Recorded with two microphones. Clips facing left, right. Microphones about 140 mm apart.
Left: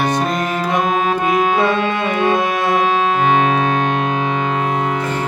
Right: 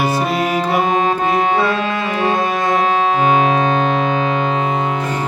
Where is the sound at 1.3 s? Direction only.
10° left (ahead or behind).